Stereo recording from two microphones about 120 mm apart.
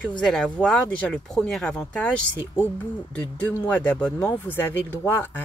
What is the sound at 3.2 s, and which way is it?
Speech, 15° left (ahead or behind).